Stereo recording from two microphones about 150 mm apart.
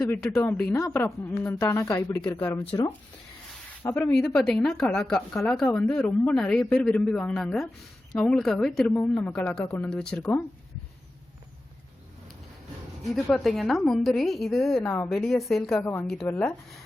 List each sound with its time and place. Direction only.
0.1 s a woman's voice: 15° left (ahead or behind)
3.8 s a woman's voice: 20° left (ahead or behind)
4.3 s a woman's voice: centre (ahead or behind)
13.1 s a woman's voice: 5° left (ahead or behind)
15.8 s speech: 15° left (ahead or behind)